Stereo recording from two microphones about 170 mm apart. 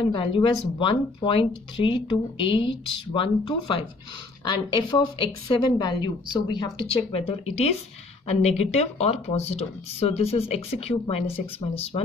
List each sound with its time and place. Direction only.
0.0 s speech: 30° left (ahead or behind)